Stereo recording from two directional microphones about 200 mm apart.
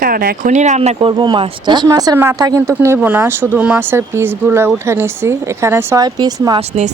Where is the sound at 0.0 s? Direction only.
45° right (ahead or behind); by 6.6 s 20° right (ahead or behind).